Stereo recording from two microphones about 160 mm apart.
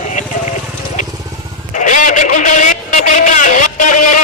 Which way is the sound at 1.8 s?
50° left (ahead or behind).